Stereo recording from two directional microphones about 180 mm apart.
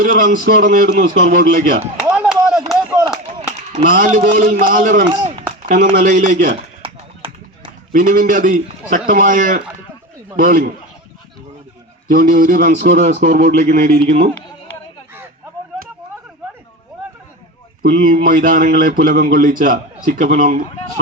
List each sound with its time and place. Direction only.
0.0 s speech: 45° right (ahead or behind)
2.0 s a sound: 5° right (ahead or behind)
3.8 s speech: 45° right (ahead or behind)
6.8 s a sound: 30° right (ahead or behind)
7.9 s speech: 50° right (ahead or behind)
12.1 s speech: 45° right (ahead or behind)
18.0 s speech: 50° right (ahead or behind)